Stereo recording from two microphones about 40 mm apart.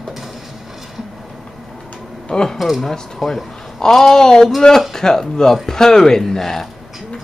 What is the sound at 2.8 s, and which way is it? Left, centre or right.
A man's voice, centre.